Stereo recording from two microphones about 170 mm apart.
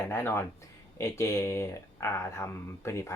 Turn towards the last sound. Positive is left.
turn(degrees=15)  # may be behind; listen again after turning